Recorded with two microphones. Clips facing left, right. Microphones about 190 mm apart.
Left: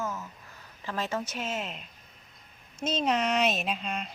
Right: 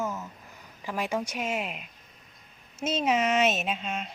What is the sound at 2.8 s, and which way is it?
Speech, 5° right (ahead or behind).